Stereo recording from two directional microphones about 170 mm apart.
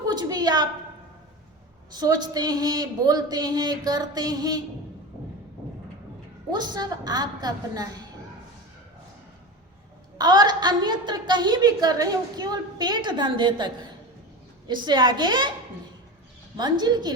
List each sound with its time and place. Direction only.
0.0 s a sound: 25° right (ahead or behind)
1.9 s a woman's voice: 25° right (ahead or behind)
6.5 s a woman's voice: 25° right (ahead or behind)
10.2 s a woman's voice: 25° right (ahead or behind)
14.7 s a woman's voice: 25° right (ahead or behind)
16.6 s a woman's voice: 25° right (ahead or behind)